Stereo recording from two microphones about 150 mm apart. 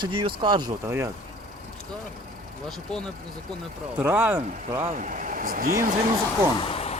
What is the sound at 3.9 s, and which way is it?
Speech, 10° right (ahead or behind).